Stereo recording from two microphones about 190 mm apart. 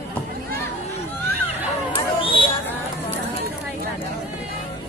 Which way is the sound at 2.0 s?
25° left (ahead or behind).